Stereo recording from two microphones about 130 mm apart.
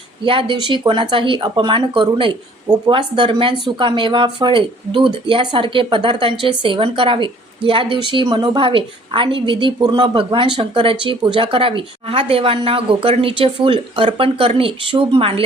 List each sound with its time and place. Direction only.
0.3 s a woman's voice: 40° right (ahead or behind)